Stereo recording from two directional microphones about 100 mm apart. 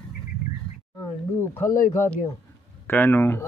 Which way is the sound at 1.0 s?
30° left (ahead or behind).